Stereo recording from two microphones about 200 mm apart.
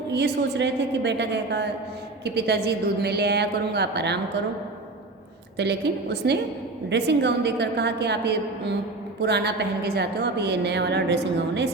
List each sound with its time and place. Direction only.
0.1 s a woman's voice: 60° right (ahead or behind)
5.5 s a woman's voice: 55° right (ahead or behind)